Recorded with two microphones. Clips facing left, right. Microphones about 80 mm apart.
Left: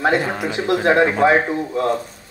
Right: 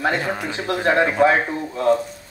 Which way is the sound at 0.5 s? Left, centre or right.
Centre.